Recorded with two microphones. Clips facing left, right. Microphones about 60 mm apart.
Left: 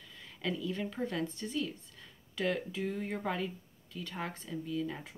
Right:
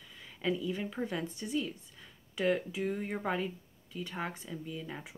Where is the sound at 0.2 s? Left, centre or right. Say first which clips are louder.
Right 3 dB; centre.